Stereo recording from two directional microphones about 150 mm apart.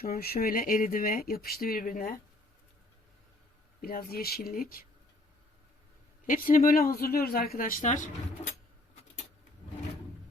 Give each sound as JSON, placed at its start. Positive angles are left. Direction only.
{"t": 0.0, "sound": "speech", "side_deg": 85}
{"t": 3.8, "sound": "speech", "side_deg": 80}
{"t": 6.2, "sound": "speech", "side_deg": 65}